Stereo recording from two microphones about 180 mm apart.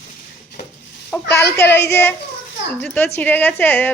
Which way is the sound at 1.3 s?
15° left (ahead or behind).